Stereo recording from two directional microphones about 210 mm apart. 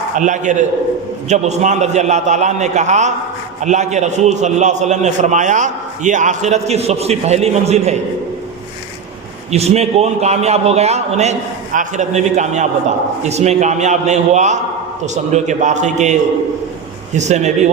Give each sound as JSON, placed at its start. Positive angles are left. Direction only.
{"t": 0.2, "sound": "a man's voice", "side_deg": -35}
{"t": 9.5, "sound": "a man's voice", "side_deg": -30}
{"t": 17.2, "sound": "a man's voice", "side_deg": -35}